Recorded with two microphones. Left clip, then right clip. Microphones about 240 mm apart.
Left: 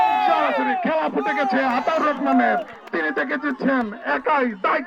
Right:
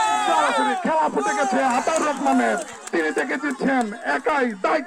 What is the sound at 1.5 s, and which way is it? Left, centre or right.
Speech, right.